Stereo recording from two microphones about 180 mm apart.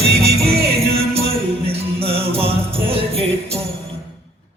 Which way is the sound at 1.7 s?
30° right (ahead or behind).